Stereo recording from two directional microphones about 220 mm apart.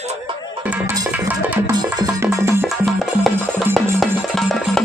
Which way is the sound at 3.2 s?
Centre (ahead or behind).